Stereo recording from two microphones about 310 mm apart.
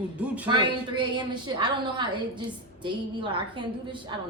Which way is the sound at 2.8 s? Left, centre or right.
Centre.